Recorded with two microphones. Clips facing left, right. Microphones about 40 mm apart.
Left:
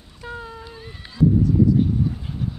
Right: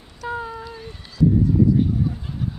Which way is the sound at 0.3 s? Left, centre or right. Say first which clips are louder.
Right 5 dB; centre.